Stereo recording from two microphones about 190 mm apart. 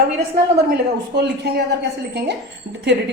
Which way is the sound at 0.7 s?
60° right (ahead or behind).